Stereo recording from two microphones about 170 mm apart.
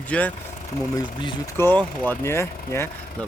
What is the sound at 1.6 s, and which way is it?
Speech, 10° left (ahead or behind).